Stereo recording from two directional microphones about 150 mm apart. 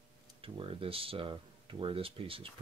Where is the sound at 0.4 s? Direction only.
35° right (ahead or behind).